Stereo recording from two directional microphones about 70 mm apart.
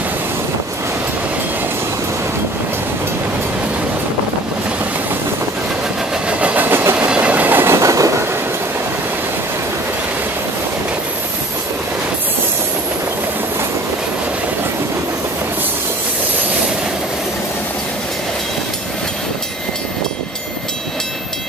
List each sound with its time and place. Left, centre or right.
6.2 s train: right
7.0 s train: centre
7.8 s train: right